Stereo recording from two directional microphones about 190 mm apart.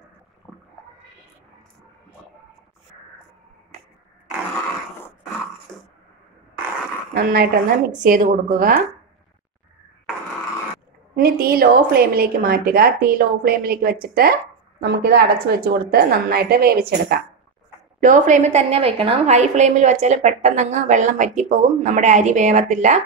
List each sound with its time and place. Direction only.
0.5 s a sound: 5° left (ahead or behind)
7.2 s a woman's voice: 50° right (ahead or behind)
11.1 s a woman's voice: 50° right (ahead or behind)
18.0 s a woman's voice: 40° right (ahead or behind)